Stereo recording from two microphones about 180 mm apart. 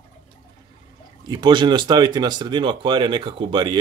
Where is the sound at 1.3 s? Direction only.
25° right (ahead or behind).